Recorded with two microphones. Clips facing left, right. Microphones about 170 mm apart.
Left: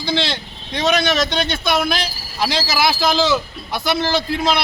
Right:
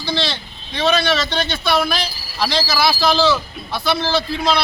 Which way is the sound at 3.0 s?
20° left (ahead or behind).